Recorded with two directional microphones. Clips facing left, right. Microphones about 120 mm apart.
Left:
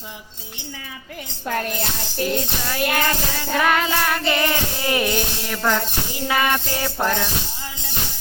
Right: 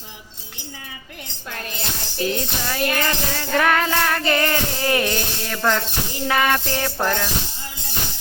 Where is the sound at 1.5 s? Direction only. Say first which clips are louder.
Left 9 dB; 55° left (ahead or behind).